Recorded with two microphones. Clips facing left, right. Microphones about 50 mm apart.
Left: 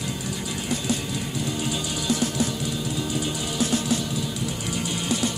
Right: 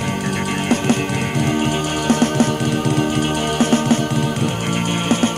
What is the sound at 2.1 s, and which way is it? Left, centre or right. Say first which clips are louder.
Music: right 9 dB; right.